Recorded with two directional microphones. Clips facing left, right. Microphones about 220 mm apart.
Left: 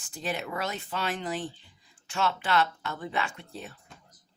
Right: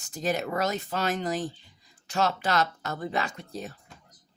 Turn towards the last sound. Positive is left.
turn(degrees=-40)  # may be behind; listen again after turning